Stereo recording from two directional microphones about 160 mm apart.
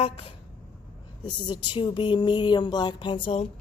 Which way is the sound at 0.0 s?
35° left (ahead or behind).